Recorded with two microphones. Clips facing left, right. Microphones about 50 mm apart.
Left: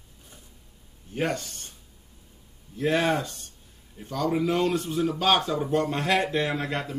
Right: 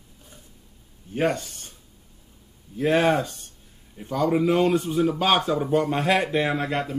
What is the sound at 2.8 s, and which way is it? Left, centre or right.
Speech, centre.